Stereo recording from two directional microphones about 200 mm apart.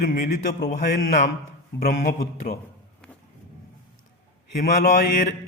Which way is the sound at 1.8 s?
40° left (ahead or behind).